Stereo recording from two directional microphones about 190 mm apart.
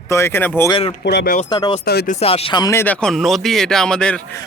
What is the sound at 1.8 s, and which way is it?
Speech, 60° left (ahead or behind).